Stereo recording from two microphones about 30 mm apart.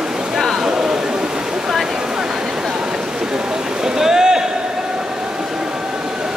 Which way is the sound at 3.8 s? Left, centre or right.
Centre.